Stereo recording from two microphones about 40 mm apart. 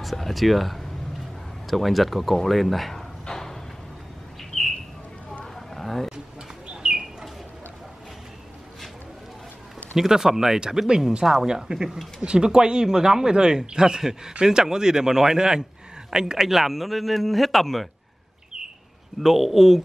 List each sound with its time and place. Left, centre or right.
0.0 s a man's voice: centre
3.3 s a sound: centre
5.8 s vehicle: centre
6.7 s bird: centre
9.9 s speech: centre
16.4 s a man's voice: centre
19.2 s a man's voice: centre